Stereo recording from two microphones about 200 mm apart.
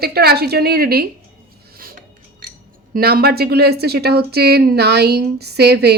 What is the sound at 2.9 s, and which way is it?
A woman's voice, 50° right (ahead or behind).